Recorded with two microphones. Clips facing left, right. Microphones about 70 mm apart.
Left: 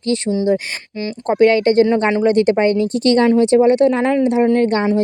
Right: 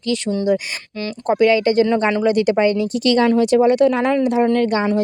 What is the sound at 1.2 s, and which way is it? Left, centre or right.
Speech, left.